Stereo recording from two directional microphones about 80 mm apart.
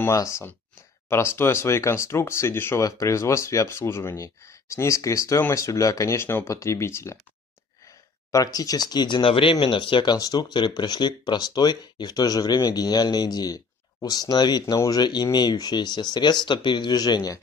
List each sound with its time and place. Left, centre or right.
0.0 s speech: left
8.3 s speech: left
10.1 s speech: left